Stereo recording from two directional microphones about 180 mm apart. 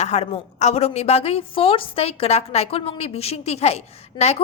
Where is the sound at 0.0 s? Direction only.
40° left (ahead or behind).